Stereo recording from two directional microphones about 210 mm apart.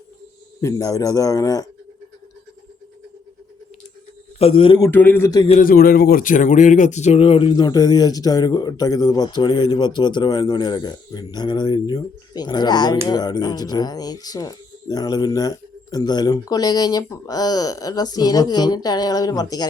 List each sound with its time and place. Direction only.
0.6 s speech: 15° left (ahead or behind)
4.4 s speech: 30° left (ahead or behind)
4.9 s speech: 10° left (ahead or behind)
5.5 s speech: 40° left (ahead or behind); by 19.6 s 15° left (ahead or behind)